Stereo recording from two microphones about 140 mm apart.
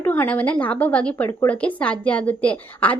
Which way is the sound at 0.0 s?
15° left (ahead or behind).